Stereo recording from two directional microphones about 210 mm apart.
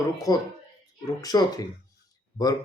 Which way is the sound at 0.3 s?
15° left (ahead or behind).